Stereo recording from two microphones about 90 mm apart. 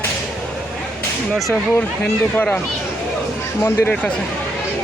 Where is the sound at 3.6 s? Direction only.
25° left (ahead or behind).